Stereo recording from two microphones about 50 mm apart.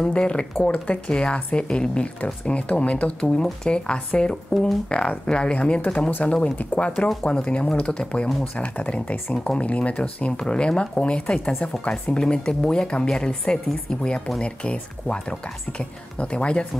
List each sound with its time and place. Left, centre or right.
0.0 s a woman's voice: centre